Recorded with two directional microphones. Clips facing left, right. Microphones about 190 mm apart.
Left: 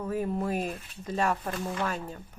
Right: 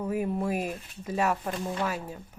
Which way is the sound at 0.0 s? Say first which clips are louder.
Right 1 dB; 10° right (ahead or behind).